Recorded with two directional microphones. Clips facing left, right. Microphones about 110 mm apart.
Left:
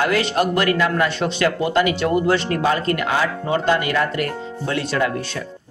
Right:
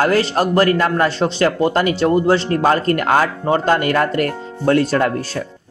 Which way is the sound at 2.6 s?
45° right (ahead or behind).